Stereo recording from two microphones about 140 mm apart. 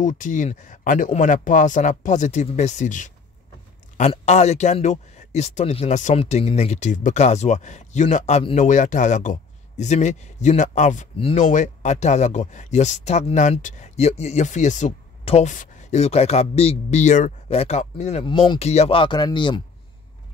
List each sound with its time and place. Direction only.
0.0 s speech: 65° left (ahead or behind)
4.1 s speech: 50° left (ahead or behind)
15.2 s speech: 45° left (ahead or behind)
15.5 s speech: 60° left (ahead or behind)
17.5 s speech: 50° left (ahead or behind)
18.2 s speech: 40° left (ahead or behind)